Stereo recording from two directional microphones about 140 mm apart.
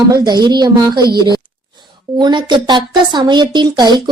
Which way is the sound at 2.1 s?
35° right (ahead or behind).